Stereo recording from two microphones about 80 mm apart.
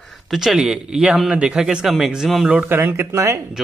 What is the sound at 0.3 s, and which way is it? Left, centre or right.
A man's voice, centre.